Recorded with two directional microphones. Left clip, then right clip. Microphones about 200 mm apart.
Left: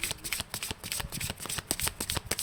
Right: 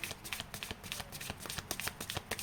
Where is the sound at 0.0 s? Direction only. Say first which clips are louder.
Left 7 dB; 40° left (ahead or behind).